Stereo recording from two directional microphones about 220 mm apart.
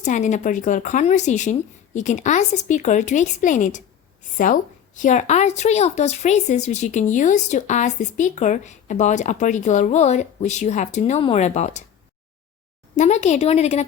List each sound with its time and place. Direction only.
0.0 s speech: 35° left (ahead or behind)
13.0 s a woman's voice: 30° left (ahead or behind)